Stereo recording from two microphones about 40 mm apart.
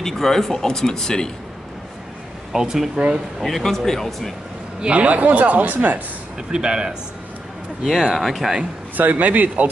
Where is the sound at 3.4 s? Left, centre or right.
Centre.